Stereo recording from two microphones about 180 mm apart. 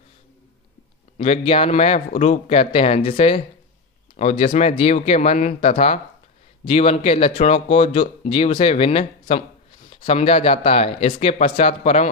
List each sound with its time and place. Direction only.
1.1 s speech: 35° left (ahead or behind)